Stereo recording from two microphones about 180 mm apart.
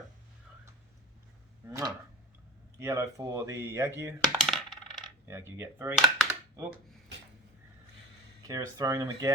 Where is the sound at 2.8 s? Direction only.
15° right (ahead or behind).